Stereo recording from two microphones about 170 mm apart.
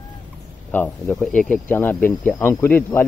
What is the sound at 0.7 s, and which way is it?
Speech, 10° left (ahead or behind).